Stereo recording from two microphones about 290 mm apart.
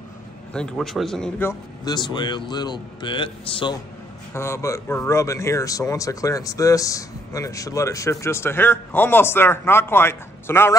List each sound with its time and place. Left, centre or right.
0.5 s speech: centre